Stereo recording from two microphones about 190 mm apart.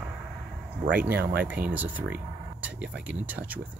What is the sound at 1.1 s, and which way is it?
Speech, 55° right (ahead or behind).